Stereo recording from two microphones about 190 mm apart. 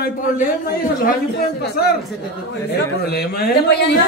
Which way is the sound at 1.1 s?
55° left (ahead or behind).